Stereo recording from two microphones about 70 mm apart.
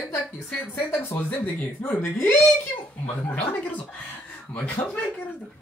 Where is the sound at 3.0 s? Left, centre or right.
Left.